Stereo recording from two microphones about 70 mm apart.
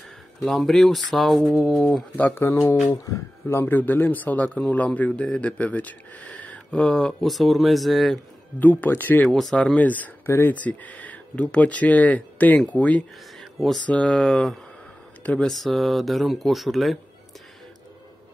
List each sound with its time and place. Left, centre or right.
0.4 s speech: centre
1.4 s speech: centre
1.7 s speech: centre
2.1 s speech: left
3.4 s a man's voice: left
6.3 s a sound: centre
7.2 s speech: centre
8.5 s a man's voice: left
9.3 s speech: centre
9.8 s a man's voice: left
13.4 s a sound: centre
13.8 s a man's voice: centre
14.2 s speech: centre